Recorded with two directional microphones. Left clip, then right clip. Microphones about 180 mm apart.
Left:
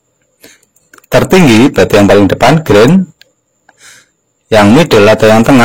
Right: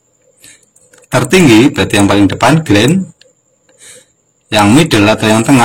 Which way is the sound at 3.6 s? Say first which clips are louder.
Left 1 dB; 60° left (ahead or behind).